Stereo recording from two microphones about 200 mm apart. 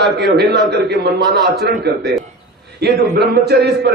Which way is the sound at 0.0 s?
55° right (ahead or behind).